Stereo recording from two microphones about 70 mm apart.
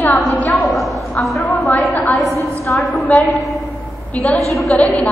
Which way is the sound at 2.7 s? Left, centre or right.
Left.